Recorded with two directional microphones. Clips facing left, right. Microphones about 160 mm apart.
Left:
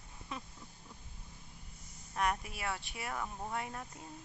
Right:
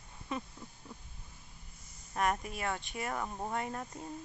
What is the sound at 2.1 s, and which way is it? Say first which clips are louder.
Speech: right 2 dB; centre (ahead or behind).